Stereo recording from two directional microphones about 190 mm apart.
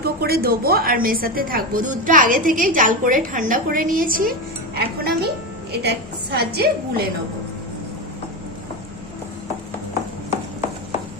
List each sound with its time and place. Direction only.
0.0 s a woman's voice: 55° right (ahead or behind)